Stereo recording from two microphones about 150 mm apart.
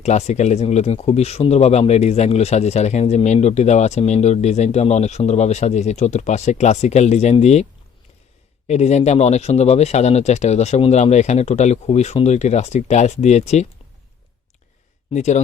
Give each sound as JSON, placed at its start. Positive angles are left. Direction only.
{"t": 0.0, "sound": "speech", "side_deg": 50}
{"t": 15.1, "sound": "speech", "side_deg": 50}